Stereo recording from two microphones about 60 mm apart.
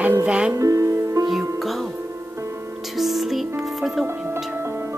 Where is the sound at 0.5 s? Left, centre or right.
Right.